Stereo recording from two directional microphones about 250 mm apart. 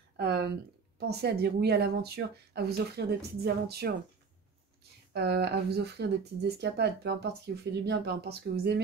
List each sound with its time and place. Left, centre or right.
0.2 s a sound: right
0.9 s speech: right
5.1 s speech: right